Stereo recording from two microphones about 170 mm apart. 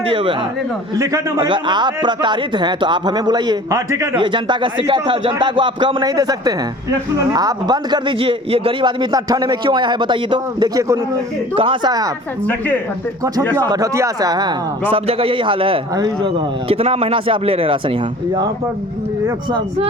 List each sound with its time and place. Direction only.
0.0 s a man's voice: 30° right (ahead or behind)
4.2 s a man's voice: 30° right (ahead or behind)
13.6 s a man's voice: 20° right (ahead or behind)
19.5 s a man's voice: 25° right (ahead or behind)